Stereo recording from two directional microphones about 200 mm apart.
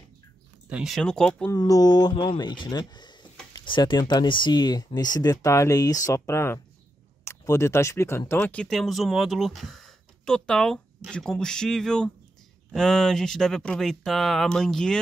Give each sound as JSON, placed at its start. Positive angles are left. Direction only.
{"t": 0.7, "sound": "speech", "side_deg": -5}
{"t": 1.5, "sound": "speech", "side_deg": 20}